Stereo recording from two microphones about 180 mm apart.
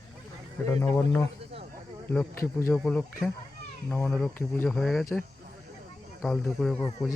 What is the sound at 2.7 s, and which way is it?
Speech, 5° left (ahead or behind).